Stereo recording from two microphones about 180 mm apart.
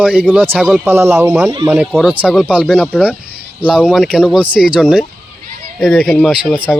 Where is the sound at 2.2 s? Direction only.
5° right (ahead or behind).